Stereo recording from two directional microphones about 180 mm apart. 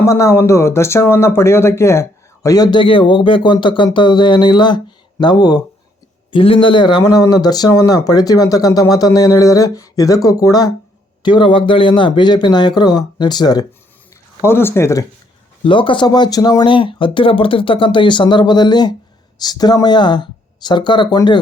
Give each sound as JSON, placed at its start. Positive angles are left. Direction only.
{"t": 0.0, "sound": "speech", "side_deg": 15}
{"t": 15.6, "sound": "speech", "side_deg": 30}